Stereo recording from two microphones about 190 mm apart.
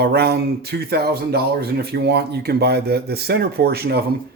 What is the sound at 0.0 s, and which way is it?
Speech, 55° right (ahead or behind).